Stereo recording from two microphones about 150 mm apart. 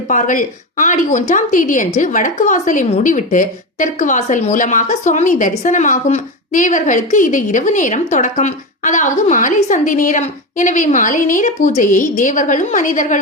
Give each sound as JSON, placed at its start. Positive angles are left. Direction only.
{"t": 0.1, "sound": "speech", "side_deg": 60}